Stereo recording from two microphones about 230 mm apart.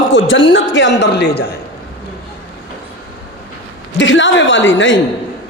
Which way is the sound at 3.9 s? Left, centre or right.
Left.